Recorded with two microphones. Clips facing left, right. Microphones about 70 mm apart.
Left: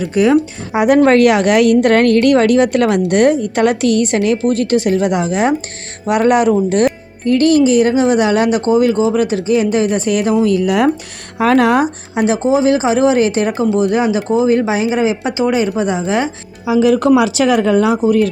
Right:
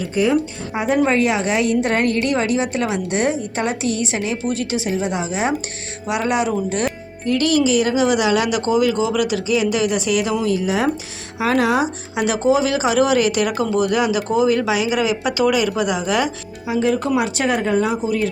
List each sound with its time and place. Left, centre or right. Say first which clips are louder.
0.0 s a woman's voice: left 6 dB; left
10.4 s a woman's voice: left 6 dB; left
12.1 s speech: left 3 dB; left
16.7 s speech: left 8 dB; left